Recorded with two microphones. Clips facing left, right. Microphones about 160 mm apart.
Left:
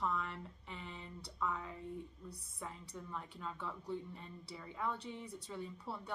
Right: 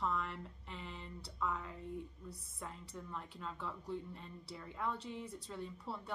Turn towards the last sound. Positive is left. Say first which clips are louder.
# even
turn(degrees=0)  # may be behind; listen again after turning